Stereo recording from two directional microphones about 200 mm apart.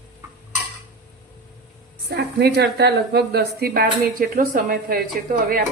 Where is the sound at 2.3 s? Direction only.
55° right (ahead or behind).